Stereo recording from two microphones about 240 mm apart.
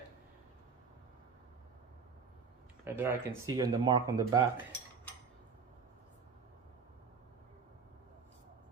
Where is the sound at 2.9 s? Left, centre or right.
Centre.